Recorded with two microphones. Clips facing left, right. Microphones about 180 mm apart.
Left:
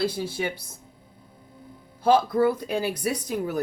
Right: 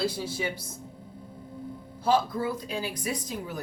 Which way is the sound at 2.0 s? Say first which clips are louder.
Left 6 dB; 65° left (ahead or behind).